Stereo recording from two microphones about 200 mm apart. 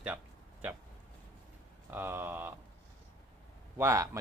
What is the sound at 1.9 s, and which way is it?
Speech, 10° right (ahead or behind).